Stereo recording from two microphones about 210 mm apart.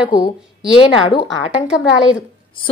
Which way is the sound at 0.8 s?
25° left (ahead or behind).